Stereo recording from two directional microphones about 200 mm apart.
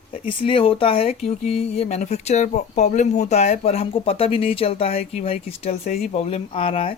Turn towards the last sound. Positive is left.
turn(degrees=25)  # may be behind; listen again after turning